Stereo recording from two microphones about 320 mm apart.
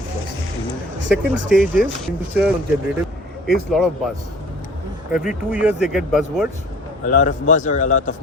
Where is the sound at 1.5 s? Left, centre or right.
Centre.